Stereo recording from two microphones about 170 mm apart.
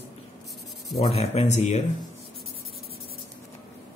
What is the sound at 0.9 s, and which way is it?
Speech, 35° left (ahead or behind).